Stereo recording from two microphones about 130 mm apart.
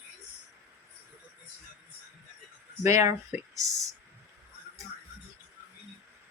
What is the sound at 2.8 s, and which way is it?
A woman's voice, 25° right (ahead or behind).